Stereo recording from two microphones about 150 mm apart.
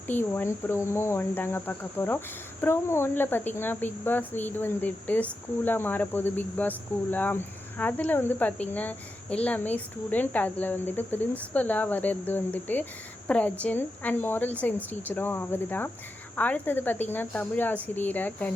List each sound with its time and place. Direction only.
0.1 s speech: 15° left (ahead or behind)